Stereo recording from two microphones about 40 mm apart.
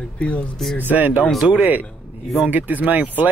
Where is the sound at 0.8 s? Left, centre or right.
Right.